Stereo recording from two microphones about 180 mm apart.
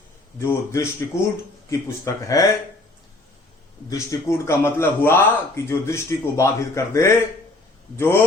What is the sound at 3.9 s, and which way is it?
A man's voice, 20° left (ahead or behind).